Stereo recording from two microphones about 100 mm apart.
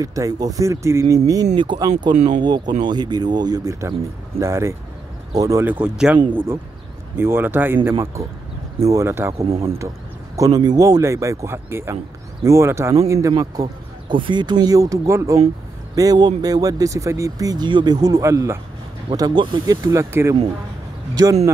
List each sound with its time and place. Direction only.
0.0 s speech: 35° right (ahead or behind)
5.7 s speech: 10° right (ahead or behind)
6.3 s speech: 25° right (ahead or behind)
9.4 s speech: 75° right (ahead or behind)
10.3 s speech: 40° right (ahead or behind)
14.0 s speech: 55° right (ahead or behind); by 17.6 s 35° right (ahead or behind)
17.6 s speech: 50° right (ahead or behind); by 18.6 s 30° right (ahead or behind)
19.1 s speech: 45° right (ahead or behind); by 20.3 s 25° right (ahead or behind)
21.1 s speech: 40° right (ahead or behind)